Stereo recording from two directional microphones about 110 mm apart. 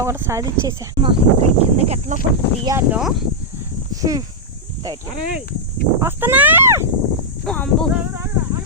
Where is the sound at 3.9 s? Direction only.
35° right (ahead or behind).